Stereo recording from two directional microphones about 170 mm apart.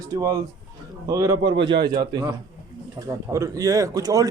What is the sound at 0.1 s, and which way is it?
A man's voice, 20° right (ahead or behind).